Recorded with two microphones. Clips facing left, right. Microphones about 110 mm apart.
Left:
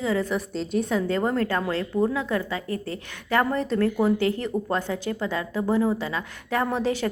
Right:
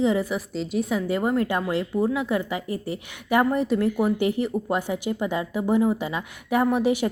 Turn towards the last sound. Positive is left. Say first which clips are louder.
# right 4 dB
turn(degrees=-15)  # may be behind; listen again after turning